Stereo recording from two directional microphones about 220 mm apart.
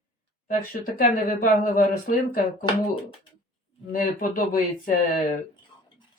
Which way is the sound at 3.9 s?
40° left (ahead or behind).